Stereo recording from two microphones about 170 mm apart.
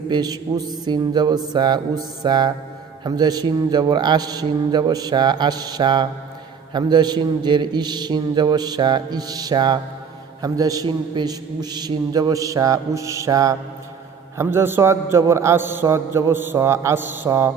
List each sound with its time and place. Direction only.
0.1 s a man's voice: 25° right (ahead or behind)